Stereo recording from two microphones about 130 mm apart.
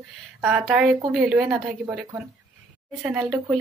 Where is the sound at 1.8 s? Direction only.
15° right (ahead or behind).